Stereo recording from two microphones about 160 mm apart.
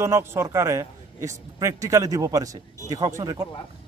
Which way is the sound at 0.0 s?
15° right (ahead or behind).